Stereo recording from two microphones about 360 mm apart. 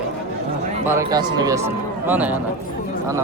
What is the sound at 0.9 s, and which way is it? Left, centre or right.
A man's voice, centre.